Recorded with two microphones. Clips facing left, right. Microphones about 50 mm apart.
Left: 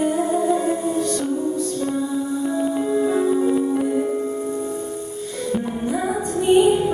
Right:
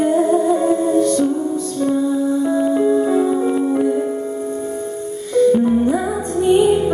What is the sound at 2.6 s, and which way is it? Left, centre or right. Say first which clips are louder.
Music: right 4 dB; centre.